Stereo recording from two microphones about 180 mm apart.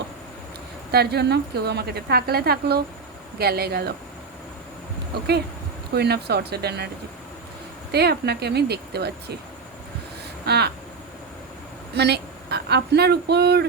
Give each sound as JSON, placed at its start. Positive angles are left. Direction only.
{"t": 0.9, "sound": "a woman's voice", "side_deg": -65}
{"t": 5.9, "sound": "a woman's voice", "side_deg": -65}
{"t": 7.9, "sound": "a woman's voice", "side_deg": -65}
{"t": 10.4, "sound": "a sound", "side_deg": -65}
{"t": 11.9, "sound": "a woman's voice", "side_deg": -65}